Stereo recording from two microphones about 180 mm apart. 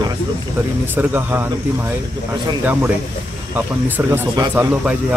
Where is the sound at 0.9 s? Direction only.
10° right (ahead or behind).